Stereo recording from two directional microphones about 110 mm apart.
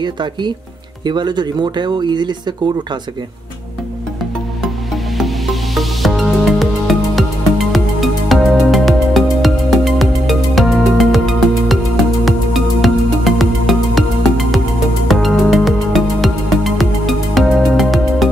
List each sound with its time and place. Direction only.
0.0 s speech: 45° right (ahead or behind)
4.6 s music: centre (ahead or behind)